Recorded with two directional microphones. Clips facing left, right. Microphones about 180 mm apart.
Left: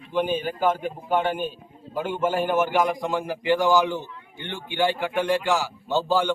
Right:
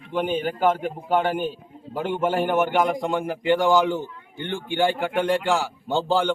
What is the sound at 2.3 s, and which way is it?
Speech, 55° right (ahead or behind).